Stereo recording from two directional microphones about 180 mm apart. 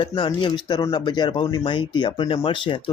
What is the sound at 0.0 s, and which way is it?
Speech, 25° left (ahead or behind).